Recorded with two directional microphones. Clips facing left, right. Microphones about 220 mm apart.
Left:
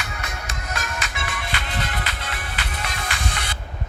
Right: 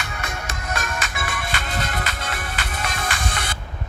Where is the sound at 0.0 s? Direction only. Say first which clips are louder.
Right 2 dB; 50° right (ahead or behind).